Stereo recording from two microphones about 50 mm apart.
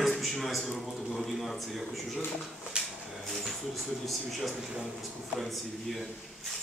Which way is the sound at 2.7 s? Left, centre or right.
Centre.